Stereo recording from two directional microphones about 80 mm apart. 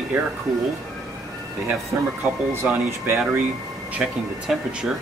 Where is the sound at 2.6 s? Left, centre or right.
Right.